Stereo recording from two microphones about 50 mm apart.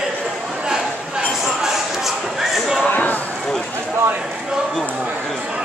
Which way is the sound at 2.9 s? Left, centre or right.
Left.